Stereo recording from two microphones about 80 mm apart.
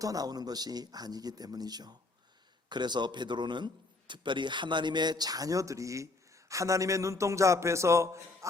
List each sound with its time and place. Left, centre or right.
0.0 s speech: right
2.6 s a man's voice: right